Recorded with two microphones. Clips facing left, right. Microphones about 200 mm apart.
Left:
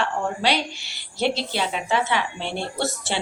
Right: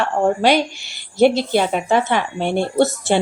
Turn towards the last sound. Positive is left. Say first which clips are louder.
# right 10 dB
turn(degrees=-50)  # may be behind; listen again after turning